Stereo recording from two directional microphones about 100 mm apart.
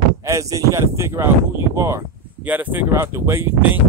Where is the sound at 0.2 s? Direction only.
30° right (ahead or behind).